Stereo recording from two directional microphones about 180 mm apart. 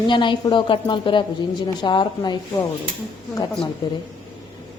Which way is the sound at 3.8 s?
20° left (ahead or behind).